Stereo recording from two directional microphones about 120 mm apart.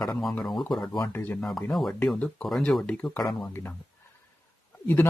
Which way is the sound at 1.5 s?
5° left (ahead or behind).